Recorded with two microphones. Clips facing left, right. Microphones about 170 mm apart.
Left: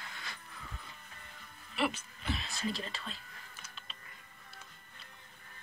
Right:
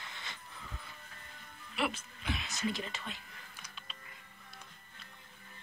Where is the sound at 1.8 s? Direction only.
5° left (ahead or behind).